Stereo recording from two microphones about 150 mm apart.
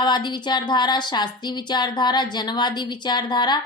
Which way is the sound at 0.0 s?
30° left (ahead or behind).